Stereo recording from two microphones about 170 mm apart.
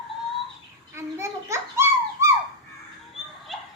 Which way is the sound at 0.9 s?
15° right (ahead or behind).